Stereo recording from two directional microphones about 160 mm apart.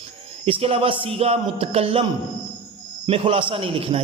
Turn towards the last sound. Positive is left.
turn(degrees=-35)  # may be behind; listen again after turning